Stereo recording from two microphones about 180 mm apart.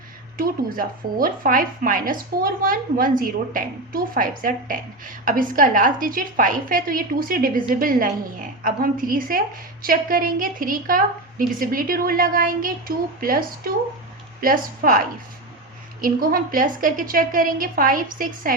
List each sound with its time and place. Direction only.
0.3 s speech: 50° right (ahead or behind)